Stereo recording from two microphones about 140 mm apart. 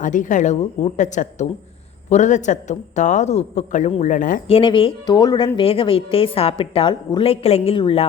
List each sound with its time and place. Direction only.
0.0 s a man's voice: 65° left (ahead or behind)
4.4 s a woman's voice: 40° left (ahead or behind)